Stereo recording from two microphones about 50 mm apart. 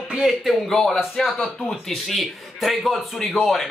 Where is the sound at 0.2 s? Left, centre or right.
Centre.